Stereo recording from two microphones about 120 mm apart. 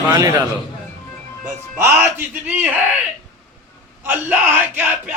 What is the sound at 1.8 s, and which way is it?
Speech, 20° right (ahead or behind).